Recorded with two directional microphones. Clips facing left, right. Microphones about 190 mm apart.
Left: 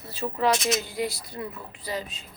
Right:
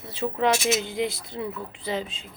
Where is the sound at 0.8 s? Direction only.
20° right (ahead or behind).